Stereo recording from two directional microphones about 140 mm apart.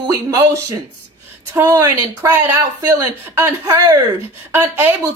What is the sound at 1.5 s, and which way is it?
A man's voice, 20° right (ahead or behind).